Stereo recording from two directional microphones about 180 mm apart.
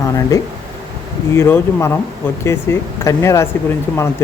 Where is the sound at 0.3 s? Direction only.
20° left (ahead or behind).